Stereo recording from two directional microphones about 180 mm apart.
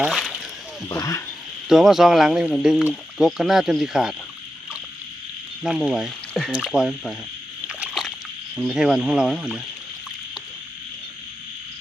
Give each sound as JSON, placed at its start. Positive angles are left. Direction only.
{"t": 0.0, "sound": "speech", "side_deg": 0}
{"t": 0.9, "sound": "speech", "side_deg": 20}
{"t": 1.7, "sound": "speech", "side_deg": 0}
{"t": 5.6, "sound": "speech", "side_deg": -5}
{"t": 7.7, "sound": "slosh", "side_deg": -5}
{"t": 8.5, "sound": "speech", "side_deg": -5}